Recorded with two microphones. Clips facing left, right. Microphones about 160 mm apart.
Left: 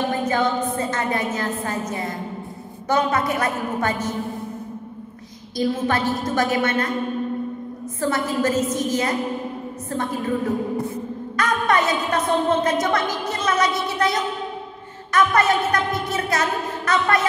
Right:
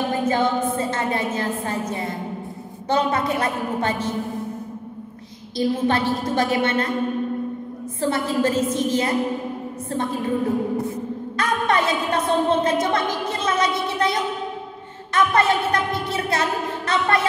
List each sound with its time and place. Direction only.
0.2 s a sound: 25° right (ahead or behind)
2.9 s a woman's voice: 30° right (ahead or behind)
5.6 s a woman's voice: 25° right (ahead or behind)
8.0 s a woman's voice: 30° right (ahead or behind)